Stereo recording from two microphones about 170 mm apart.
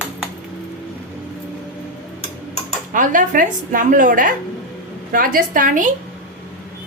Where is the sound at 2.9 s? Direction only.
50° right (ahead or behind).